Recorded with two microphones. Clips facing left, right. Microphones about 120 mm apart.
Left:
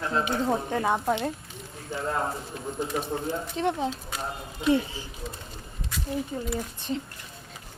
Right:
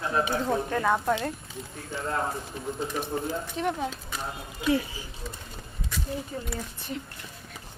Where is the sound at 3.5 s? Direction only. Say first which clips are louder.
Left 4 dB; 25° left (ahead or behind).